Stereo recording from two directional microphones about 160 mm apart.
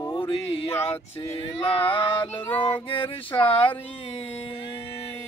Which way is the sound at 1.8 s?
30° left (ahead or behind).